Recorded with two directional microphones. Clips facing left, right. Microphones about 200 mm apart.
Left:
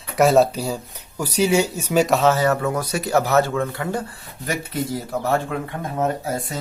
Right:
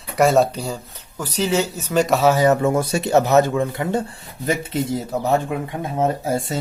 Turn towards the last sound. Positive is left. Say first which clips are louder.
# right 3 dB
turn(degrees=-25)  # may be behind; listen again after turning